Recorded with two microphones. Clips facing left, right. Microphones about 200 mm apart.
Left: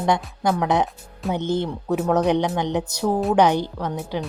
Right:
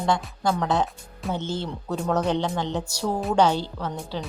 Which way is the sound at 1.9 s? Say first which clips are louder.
Left 5 dB; 5° left (ahead or behind).